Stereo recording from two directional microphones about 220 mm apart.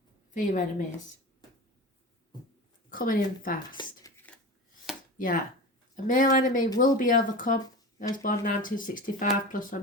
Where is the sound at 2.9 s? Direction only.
40° left (ahead or behind).